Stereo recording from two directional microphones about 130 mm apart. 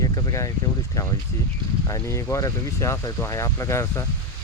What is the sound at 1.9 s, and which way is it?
Speech, 25° left (ahead or behind).